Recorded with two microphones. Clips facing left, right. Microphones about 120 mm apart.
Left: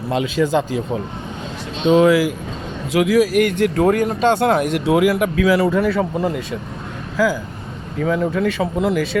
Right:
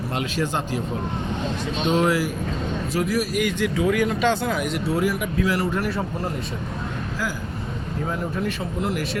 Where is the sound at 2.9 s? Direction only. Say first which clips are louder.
Left 10 dB; 90° left.